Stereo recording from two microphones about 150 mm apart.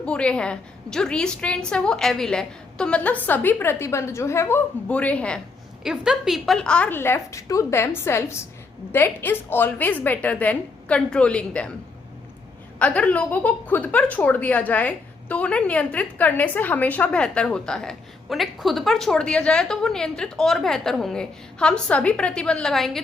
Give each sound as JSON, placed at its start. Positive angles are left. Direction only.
{"t": 0.0, "sound": "a woman's voice", "side_deg": 5}
{"t": 12.8, "sound": "a woman's voice", "side_deg": 10}